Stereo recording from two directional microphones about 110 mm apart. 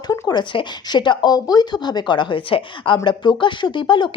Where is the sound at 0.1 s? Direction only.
40° left (ahead or behind).